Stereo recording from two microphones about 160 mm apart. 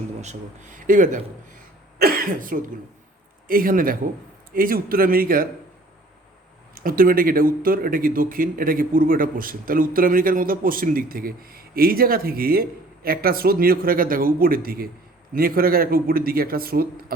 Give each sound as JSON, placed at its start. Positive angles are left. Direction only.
{"t": 0.2, "sound": "speech", "side_deg": -50}
{"t": 2.0, "sound": "speech", "side_deg": -65}
{"t": 6.7, "sound": "a man's voice", "side_deg": -65}